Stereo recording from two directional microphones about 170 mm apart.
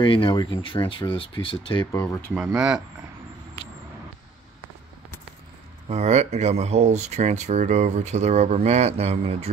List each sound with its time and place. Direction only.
0.0 s speech: 30° left (ahead or behind)
1.9 s speech: 15° left (ahead or behind)
2.3 s speech: 5° right (ahead or behind)
5.9 s speech: 40° right (ahead or behind)